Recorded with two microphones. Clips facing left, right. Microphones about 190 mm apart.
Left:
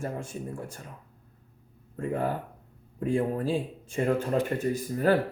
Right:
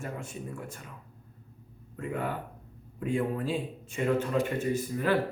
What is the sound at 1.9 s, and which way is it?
Speech, 30° left (ahead or behind).